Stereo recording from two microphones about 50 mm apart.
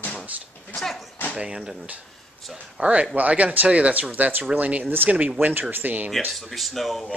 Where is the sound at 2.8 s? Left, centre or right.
Right.